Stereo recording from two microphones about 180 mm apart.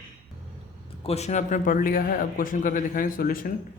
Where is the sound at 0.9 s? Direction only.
35° left (ahead or behind).